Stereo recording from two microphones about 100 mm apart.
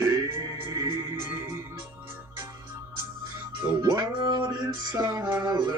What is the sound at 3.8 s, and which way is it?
Music, 40° right (ahead or behind).